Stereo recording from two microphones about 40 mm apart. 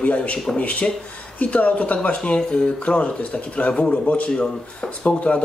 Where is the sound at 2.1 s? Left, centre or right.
Left.